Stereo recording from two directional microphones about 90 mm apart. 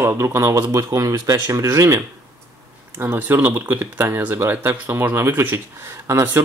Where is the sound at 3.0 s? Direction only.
20° right (ahead or behind).